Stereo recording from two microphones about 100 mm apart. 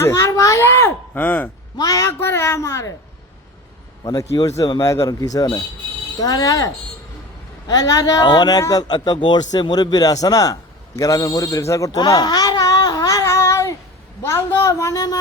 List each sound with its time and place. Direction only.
0.0 s speech: 30° left (ahead or behind)
1.8 s a woman's voice: 35° left (ahead or behind)
4.0 s speech: 35° left (ahead or behind)
7.7 s a man's voice: 40° left (ahead or behind)